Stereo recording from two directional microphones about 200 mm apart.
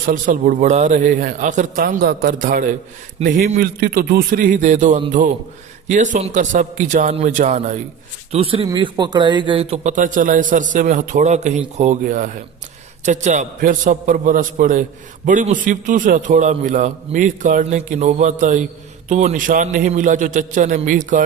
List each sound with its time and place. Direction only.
0.0 s a man's voice: 45° right (ahead or behind)